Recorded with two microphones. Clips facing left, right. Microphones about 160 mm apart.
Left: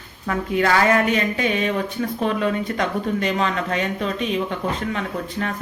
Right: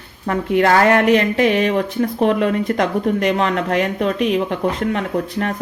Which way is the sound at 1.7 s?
30° right (ahead or behind).